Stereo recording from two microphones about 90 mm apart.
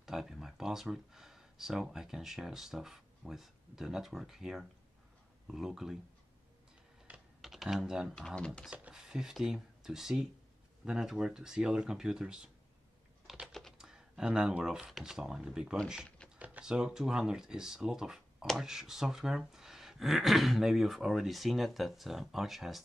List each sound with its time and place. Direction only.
0.0 s speech: 5° right (ahead or behind)
7.1 s typing: 20° right (ahead or behind)
7.4 s speech: centre (ahead or behind)
8.1 s speech: 10° left (ahead or behind)
8.6 s speech: 10° right (ahead or behind)
13.5 s typing: 5° left (ahead or behind)
13.7 s speech: 5° right (ahead or behind)